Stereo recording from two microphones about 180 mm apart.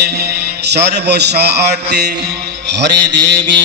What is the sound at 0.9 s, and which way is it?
Mantra, 65° right (ahead or behind).